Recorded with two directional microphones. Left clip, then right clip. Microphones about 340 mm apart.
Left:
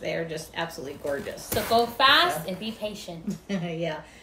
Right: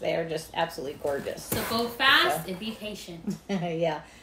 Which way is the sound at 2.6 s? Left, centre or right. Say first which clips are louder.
Left 3 dB; centre.